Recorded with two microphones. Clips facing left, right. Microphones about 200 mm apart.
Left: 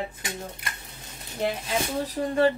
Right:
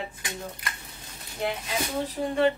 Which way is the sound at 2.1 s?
35° left (ahead or behind).